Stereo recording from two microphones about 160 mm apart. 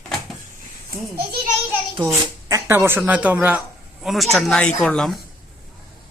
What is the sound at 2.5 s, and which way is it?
A child's voice, 15° right (ahead or behind).